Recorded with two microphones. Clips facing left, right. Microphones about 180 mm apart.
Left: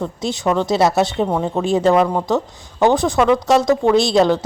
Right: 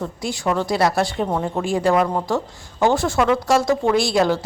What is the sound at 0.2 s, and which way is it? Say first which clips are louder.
Speech: left 3 dB; 20° left (ahead or behind).